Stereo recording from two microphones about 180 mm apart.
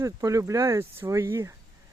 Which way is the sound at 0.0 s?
15° right (ahead or behind).